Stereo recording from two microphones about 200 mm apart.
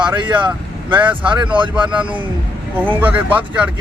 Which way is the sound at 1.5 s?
25° right (ahead or behind).